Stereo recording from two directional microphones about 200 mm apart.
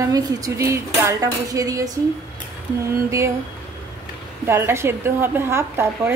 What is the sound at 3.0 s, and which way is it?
Speech, 15° right (ahead or behind).